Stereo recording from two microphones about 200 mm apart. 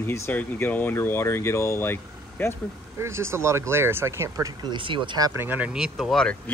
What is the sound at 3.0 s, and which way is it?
Speech, 15° right (ahead or behind).